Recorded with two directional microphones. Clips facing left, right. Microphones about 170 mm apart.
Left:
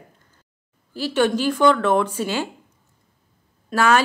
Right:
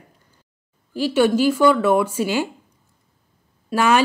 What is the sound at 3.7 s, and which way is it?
Speech, 15° right (ahead or behind).